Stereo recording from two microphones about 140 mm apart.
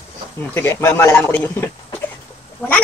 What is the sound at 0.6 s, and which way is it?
A man's voice, 15° left (ahead or behind).